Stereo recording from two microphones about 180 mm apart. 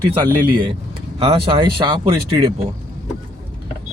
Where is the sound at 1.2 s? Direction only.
30° right (ahead or behind).